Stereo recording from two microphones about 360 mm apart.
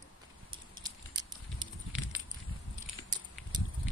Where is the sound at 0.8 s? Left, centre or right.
Centre.